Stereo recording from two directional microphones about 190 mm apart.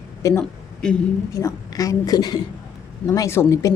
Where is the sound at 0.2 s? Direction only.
15° left (ahead or behind).